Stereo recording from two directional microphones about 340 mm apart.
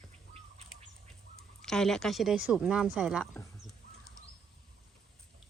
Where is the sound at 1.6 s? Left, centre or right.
Centre.